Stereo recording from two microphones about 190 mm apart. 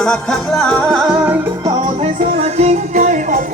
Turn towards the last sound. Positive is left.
turn(degrees=-40)  # may be behind; listen again after turning